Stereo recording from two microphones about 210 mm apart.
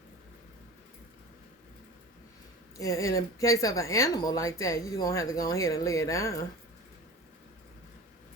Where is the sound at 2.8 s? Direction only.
15° left (ahead or behind).